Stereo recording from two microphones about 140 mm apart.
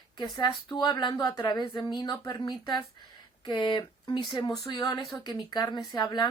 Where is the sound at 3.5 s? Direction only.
30° left (ahead or behind).